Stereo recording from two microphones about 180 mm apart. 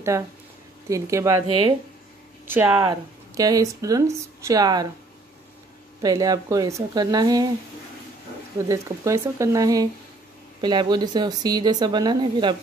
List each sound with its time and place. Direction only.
0.1 s speech: 15° right (ahead or behind)
2.4 s speech: 10° right (ahead or behind)
2.8 s speech: 20° right (ahead or behind)
6.0 s speech: 20° right (ahead or behind)
8.5 s speech: 15° right (ahead or behind)